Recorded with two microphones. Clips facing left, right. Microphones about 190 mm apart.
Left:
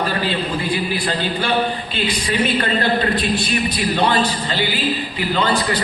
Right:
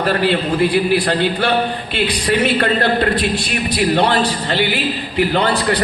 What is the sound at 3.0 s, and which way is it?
A man's voice, 65° right (ahead or behind).